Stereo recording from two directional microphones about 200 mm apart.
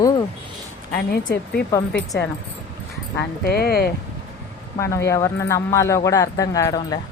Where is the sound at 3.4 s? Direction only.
50° left (ahead or behind).